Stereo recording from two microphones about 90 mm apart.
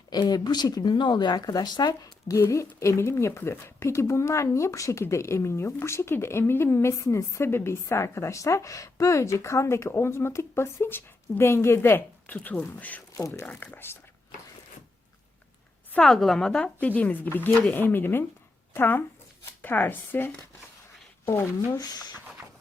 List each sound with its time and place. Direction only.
0.1 s speech: 50° left (ahead or behind); by 13.0 s 15° left (ahead or behind)
13.1 s speech: 35° left (ahead or behind)
13.5 s speech: 20° left (ahead or behind)
16.0 s speech: 5° left (ahead or behind); by 21.5 s 25° left (ahead or behind)
21.8 s speech: 45° left (ahead or behind)